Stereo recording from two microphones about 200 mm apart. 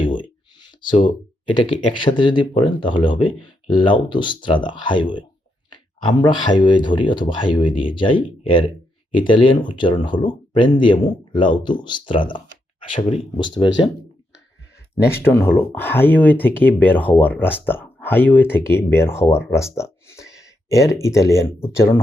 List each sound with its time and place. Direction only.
0.0 s speech: 25° left (ahead or behind)
15.0 s speech: 10° left (ahead or behind)